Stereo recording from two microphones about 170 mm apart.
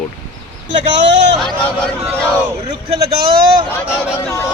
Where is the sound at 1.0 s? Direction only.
90° right.